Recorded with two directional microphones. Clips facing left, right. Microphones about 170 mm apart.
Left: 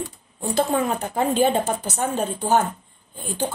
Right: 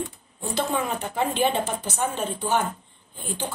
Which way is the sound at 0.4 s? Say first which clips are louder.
Left 5 dB; 45° left (ahead or behind).